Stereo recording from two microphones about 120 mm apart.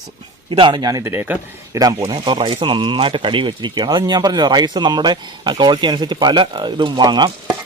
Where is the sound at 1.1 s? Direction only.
15° right (ahead or behind).